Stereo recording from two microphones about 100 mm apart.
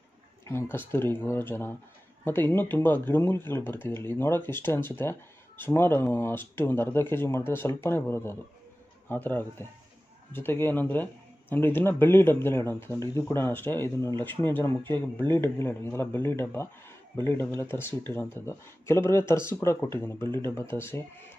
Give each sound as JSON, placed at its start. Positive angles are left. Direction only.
{"t": 0.5, "sound": "speech", "side_deg": 25}